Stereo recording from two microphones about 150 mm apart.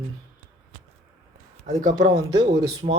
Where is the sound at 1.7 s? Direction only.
60° right (ahead or behind); by 2.6 s 75° right (ahead or behind).